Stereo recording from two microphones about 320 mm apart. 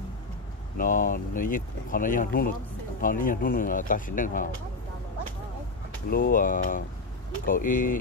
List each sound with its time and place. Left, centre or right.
0.7 s speech: left
6.0 s speech: left